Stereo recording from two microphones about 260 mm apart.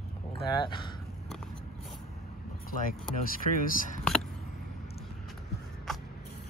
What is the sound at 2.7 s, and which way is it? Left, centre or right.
Speech, left.